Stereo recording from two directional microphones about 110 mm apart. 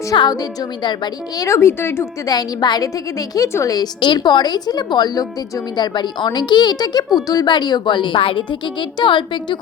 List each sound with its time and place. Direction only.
0.2 s a woman's voice: 40° left (ahead or behind)
1.5 s speech: 25° left (ahead or behind)
2.2 s a woman's voice: 35° left (ahead or behind)